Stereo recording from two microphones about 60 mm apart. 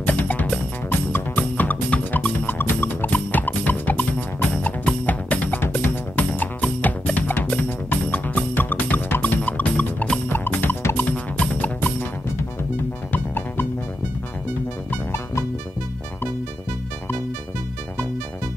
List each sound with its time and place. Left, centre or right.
0.0 s music: left
2.4 s music: left
10.2 s music: left
11.1 s music: left
13.1 s music: left